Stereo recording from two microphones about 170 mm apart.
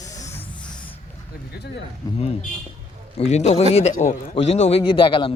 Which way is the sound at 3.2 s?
40° left (ahead or behind).